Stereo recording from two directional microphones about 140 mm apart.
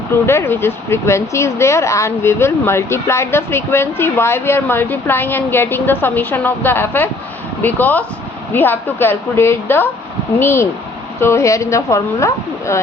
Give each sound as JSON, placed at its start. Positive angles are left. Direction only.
{"t": 0.3, "sound": "a woman's voice", "side_deg": 15}